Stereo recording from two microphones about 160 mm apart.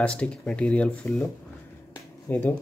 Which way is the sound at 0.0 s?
5° left (ahead or behind).